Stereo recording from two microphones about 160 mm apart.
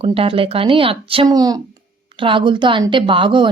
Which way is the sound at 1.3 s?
25° right (ahead or behind).